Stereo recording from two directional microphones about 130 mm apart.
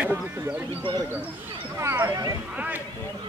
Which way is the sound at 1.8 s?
20° right (ahead or behind).